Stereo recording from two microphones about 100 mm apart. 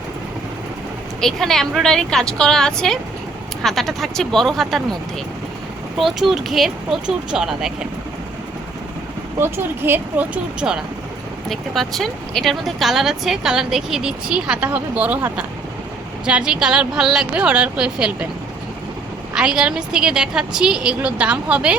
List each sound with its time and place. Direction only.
1.2 s speech: 5° left (ahead or behind)
6.0 s speech: centre (ahead or behind)
9.4 s a woman's voice: 20° right (ahead or behind)
11.4 s a woman's voice: centre (ahead or behind)
19.3 s a woman's voice: 5° right (ahead or behind)